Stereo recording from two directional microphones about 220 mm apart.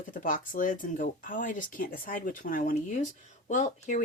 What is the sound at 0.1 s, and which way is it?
Speech, 35° left (ahead or behind).